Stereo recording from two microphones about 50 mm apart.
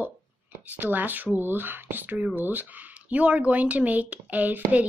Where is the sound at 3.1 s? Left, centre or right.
Right.